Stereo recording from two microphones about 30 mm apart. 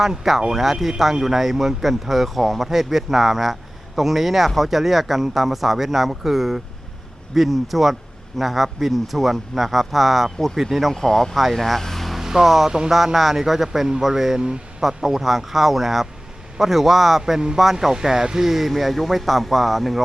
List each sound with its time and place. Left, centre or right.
0.5 s a man's voice: centre
10.9 s a man's voice: centre
11.8 s vehicle: centre
12.2 s a man's voice: centre
17.9 s speech: centre
18.4 s a man's voice: centre